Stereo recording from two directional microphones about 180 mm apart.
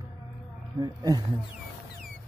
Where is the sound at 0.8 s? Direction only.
25° right (ahead or behind).